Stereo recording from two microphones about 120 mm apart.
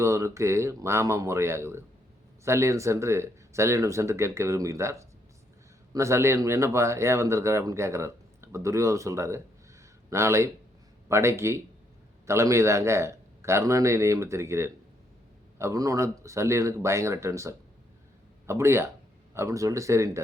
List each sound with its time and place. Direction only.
0.0 s speech: 25° right (ahead or behind)